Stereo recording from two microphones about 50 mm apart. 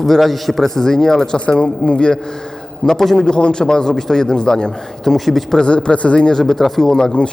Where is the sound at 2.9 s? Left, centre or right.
Centre.